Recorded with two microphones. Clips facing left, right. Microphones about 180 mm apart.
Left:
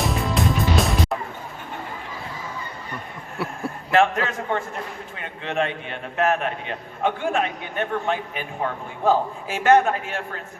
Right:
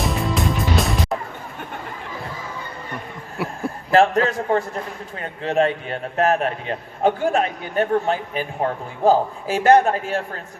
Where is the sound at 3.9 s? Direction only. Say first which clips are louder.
Right 4 dB; 35° right (ahead or behind).